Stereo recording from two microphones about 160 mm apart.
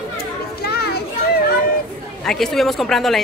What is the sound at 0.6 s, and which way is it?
Children playing, 80° left.